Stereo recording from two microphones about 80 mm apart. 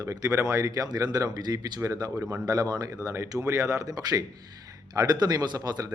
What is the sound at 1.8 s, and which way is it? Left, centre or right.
Speech, right.